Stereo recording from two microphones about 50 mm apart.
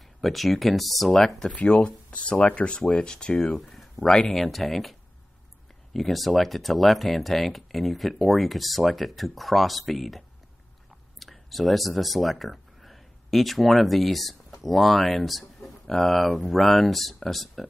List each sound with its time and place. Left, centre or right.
0.2 s speech: centre
3.5 s a sound: centre
4.0 s speech: centre
4.3 s speech: centre
5.9 s speech: centre